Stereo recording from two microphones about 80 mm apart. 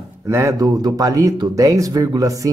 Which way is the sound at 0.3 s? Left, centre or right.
Right.